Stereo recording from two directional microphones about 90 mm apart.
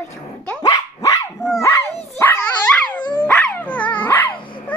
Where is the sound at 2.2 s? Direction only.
20° left (ahead or behind).